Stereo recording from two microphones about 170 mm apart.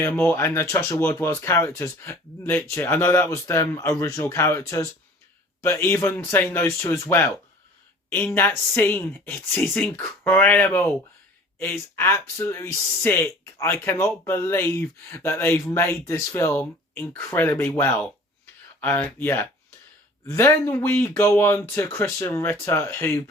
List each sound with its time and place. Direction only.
0.0 s speech: 15° left (ahead or behind)